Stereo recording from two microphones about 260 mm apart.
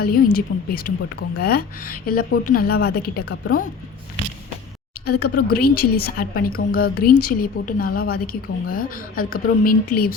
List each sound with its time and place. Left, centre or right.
0.0 s a woman's voice: left
5.0 s a woman's voice: left